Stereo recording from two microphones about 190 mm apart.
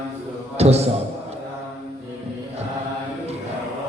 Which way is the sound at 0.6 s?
35° right (ahead or behind).